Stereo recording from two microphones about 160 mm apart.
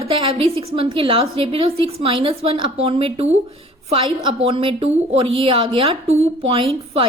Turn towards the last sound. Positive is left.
turn(degrees=-35)  # may be behind; listen again after turning